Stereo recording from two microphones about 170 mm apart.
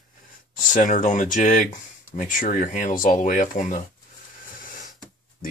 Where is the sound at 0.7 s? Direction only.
50° left (ahead or behind).